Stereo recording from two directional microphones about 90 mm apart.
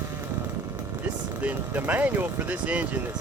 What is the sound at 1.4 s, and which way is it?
Speech, 20° right (ahead or behind).